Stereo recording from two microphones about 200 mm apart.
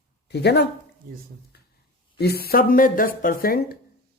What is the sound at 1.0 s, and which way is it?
Speech, 45° right (ahead or behind).